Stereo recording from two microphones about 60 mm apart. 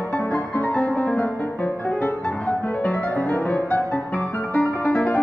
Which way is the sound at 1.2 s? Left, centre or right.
Left.